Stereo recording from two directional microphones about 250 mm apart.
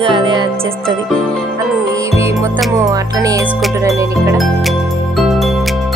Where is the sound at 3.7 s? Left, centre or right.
Centre.